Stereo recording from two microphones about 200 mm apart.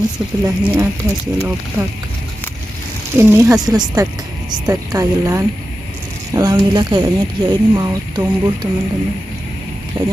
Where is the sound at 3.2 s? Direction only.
15° right (ahead or behind).